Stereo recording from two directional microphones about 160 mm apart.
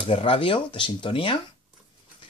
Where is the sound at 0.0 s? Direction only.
35° left (ahead or behind).